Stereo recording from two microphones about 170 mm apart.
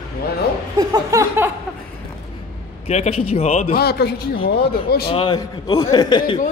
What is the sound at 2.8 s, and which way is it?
Speech, 40° left (ahead or behind).